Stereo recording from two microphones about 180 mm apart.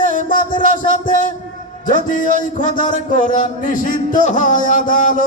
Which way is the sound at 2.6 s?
45° left (ahead or behind).